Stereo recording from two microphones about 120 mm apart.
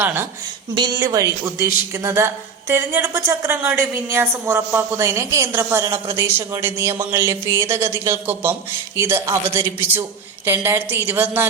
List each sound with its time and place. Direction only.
0.0 s a woman's voice: 20° right (ahead or behind)
0.9 s a woman's voice: 30° right (ahead or behind)